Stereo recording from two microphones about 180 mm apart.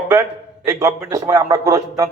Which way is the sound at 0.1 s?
15° right (ahead or behind).